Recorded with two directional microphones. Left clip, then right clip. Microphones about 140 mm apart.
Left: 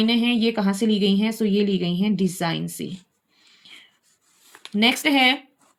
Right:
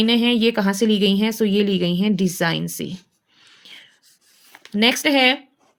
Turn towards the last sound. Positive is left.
turn(degrees=-40)  # may be behind; listen again after turning